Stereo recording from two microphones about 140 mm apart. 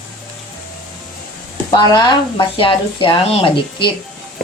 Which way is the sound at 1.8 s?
35° left (ahead or behind).